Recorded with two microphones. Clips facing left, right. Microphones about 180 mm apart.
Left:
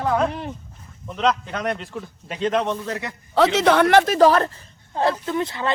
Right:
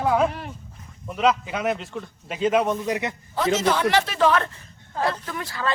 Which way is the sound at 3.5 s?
65° left (ahead or behind).